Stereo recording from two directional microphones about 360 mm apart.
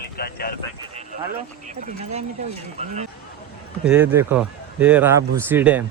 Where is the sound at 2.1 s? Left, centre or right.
Centre.